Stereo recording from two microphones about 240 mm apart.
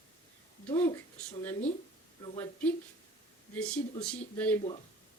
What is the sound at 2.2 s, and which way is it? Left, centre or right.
Speech, centre.